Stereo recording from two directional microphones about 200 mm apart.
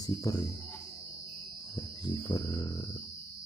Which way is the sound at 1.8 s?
20° left (ahead or behind).